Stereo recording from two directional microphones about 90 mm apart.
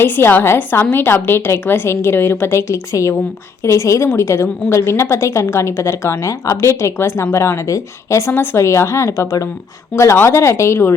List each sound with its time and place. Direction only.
0.0 s a woman's voice: 25° left (ahead or behind)